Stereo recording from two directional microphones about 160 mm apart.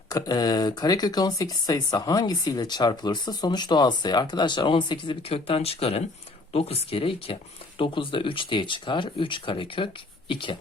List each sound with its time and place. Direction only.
0.1 s speech: 25° left (ahead or behind)